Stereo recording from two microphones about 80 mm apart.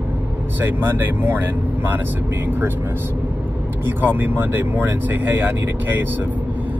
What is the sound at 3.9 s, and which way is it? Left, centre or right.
Speech, right.